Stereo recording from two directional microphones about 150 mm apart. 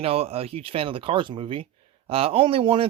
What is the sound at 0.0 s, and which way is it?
Speech, 45° right (ahead or behind).